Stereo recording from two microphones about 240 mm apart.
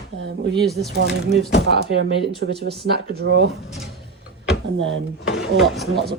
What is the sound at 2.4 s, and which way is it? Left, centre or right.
Speech, right.